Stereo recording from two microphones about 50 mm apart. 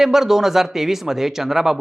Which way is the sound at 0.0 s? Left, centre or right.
Centre.